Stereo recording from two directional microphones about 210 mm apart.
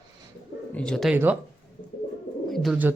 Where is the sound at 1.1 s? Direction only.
10° right (ahead or behind).